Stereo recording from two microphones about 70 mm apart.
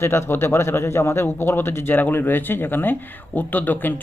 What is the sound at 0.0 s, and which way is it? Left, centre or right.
Speech, left.